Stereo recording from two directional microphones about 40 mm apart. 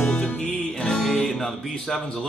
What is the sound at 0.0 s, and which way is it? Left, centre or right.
Music, left.